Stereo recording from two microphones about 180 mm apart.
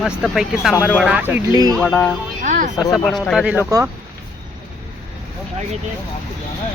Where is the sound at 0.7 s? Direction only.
10° left (ahead or behind).